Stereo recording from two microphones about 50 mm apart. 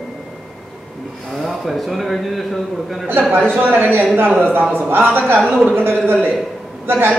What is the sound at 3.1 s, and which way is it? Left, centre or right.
Speech, right.